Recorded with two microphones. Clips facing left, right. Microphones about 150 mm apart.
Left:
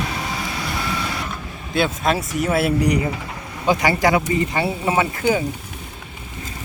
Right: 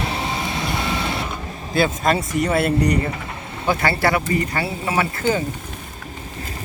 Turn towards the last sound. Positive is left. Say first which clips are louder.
# left 2 dB
turn(degrees=10)  # may be behind; listen again after turning